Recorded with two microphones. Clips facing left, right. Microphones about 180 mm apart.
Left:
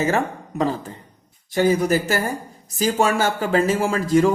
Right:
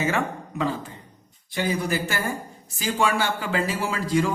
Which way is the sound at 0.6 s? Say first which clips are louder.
Left 5 dB; 40° left (ahead or behind).